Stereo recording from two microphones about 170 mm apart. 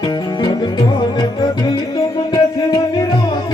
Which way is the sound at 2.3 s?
20° left (ahead or behind).